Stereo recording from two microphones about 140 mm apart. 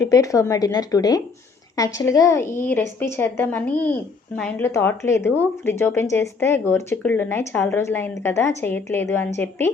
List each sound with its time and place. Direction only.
0.0 s speech: 25° left (ahead or behind); by 4.6 s 5° left (ahead or behind)
4.6 s speech: 15° left (ahead or behind)